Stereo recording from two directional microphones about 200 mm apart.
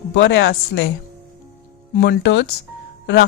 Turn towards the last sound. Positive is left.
turn(degrees=55)  # may be behind; listen again after turning